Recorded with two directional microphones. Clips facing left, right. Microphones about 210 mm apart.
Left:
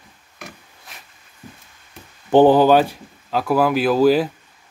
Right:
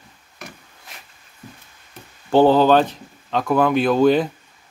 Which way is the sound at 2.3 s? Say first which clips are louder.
Left 2 dB; 15° left (ahead or behind).